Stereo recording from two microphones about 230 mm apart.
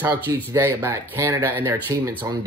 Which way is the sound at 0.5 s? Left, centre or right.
Centre.